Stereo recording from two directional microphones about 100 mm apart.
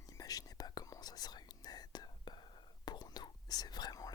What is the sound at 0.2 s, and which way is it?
Whispering, 35° left (ahead or behind).